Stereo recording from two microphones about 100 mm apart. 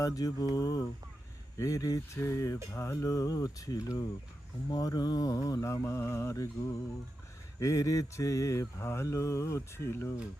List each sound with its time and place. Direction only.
0.0 s mantra: 35° left (ahead or behind)
7.6 s mantra: 35° left (ahead or behind)